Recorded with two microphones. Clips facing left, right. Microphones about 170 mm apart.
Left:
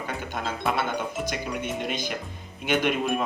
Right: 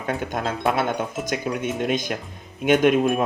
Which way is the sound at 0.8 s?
45° right (ahead or behind).